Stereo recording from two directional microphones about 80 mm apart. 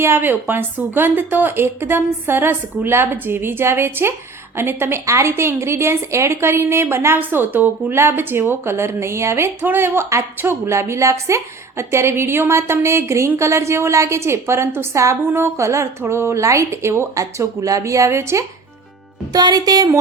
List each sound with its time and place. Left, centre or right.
0.0 s a woman's voice: right
19.3 s speech: right